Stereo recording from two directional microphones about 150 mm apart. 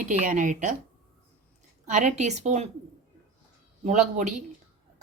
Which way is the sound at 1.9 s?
55° right (ahead or behind).